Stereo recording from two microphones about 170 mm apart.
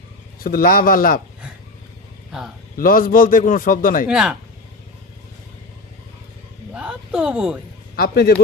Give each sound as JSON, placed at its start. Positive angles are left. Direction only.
{"t": 0.3, "sound": "a man's voice", "side_deg": 60}
{"t": 2.7, "sound": "a man's voice", "side_deg": 55}
{"t": 4.1, "sound": "speech", "side_deg": -5}
{"t": 6.7, "sound": "a sound", "side_deg": -5}
{"t": 7.9, "sound": "speech", "side_deg": 65}